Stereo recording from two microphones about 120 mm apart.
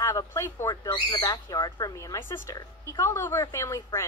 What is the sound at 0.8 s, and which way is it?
Speech, 40° left (ahead or behind).